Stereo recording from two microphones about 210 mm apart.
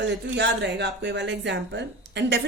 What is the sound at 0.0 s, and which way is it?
A woman's voice, 55° right (ahead or behind).